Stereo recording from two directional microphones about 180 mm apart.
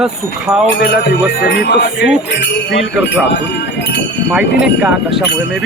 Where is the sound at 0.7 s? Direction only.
70° left (ahead or behind).